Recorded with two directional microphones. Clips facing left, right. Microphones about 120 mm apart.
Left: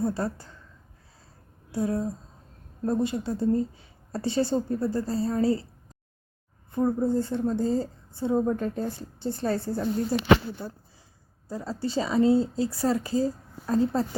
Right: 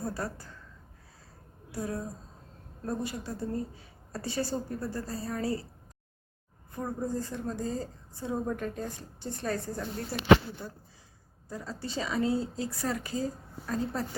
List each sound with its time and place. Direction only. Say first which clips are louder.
0.0 s a woman's voice: left 7 dB; 25° left (ahead or behind)
1.7 s a woman's voice: left 8 dB; 25° left (ahead or behind)
6.7 s a woman's voice: left 9 dB; 25° left (ahead or behind)